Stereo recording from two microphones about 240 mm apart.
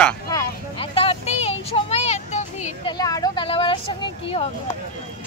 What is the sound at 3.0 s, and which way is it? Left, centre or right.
Vehicle, centre.